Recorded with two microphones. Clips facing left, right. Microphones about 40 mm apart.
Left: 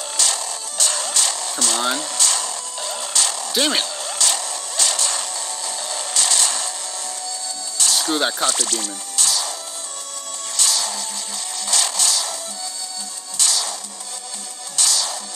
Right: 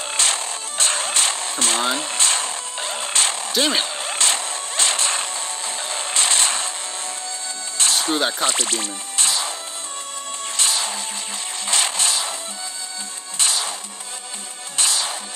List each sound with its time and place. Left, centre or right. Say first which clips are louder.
0.1 s music: right 2 dB; right
3.8 s zipper: right 1 dB; right
7.7 s music: right 1 dB; right
8.2 s speech: left 1 dB; centre
8.5 s speech: right 1 dB; right
10.5 s music: even; right
11.6 s a sound: right 1 dB; right
13.4 s music: even; right
14.8 s music: even; right